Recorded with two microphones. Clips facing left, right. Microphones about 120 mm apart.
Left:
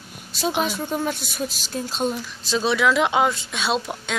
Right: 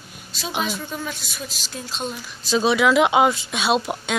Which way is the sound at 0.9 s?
50° left (ahead or behind).